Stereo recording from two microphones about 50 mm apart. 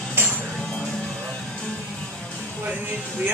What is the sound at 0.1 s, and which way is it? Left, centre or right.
Music, right.